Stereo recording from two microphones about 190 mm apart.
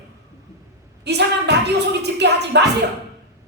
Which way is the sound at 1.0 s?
60° right (ahead or behind).